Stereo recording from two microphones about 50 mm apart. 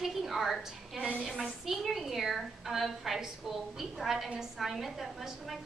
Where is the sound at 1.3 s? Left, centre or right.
Centre.